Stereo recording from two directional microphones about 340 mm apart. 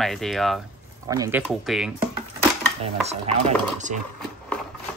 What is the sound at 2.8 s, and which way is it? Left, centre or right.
Chopping, centre.